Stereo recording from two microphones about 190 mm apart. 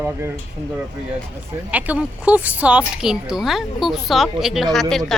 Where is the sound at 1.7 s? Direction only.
10° right (ahead or behind).